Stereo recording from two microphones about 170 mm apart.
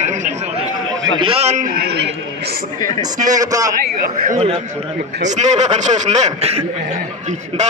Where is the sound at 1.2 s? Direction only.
35° right (ahead or behind); by 2.5 s 75° right (ahead or behind).